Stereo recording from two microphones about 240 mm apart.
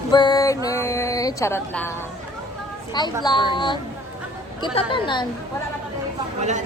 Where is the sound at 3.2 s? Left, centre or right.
Centre.